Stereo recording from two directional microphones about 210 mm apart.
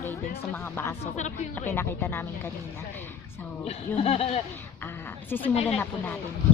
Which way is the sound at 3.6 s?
30° left (ahead or behind).